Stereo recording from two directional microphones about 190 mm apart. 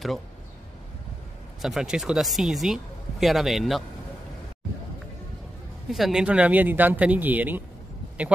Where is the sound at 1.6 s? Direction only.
Centre (ahead or behind).